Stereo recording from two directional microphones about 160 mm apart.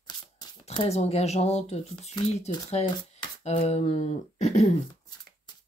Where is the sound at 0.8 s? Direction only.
40° left (ahead or behind).